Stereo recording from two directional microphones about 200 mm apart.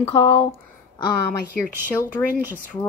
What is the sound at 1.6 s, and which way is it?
Speech, 10° right (ahead or behind).